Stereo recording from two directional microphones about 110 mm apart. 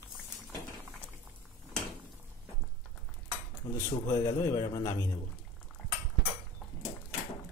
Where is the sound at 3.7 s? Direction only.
30° left (ahead or behind).